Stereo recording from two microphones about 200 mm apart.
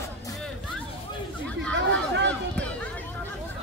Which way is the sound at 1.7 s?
60° right (ahead or behind).